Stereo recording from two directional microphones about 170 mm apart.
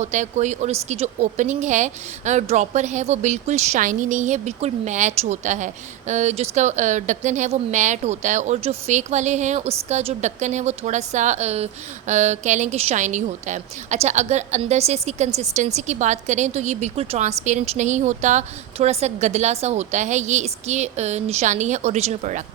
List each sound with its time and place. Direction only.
0.0 s speech: 45° right (ahead or behind)